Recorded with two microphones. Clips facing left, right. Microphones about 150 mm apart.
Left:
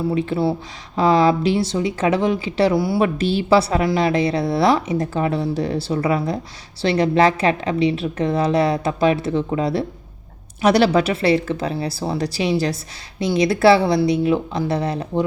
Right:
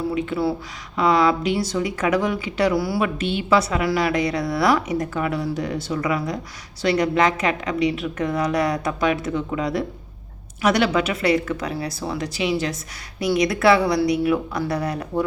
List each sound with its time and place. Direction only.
0.1 s speech: 30° left (ahead or behind)